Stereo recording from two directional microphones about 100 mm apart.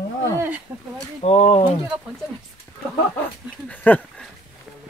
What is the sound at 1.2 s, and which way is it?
Speech, 90° left.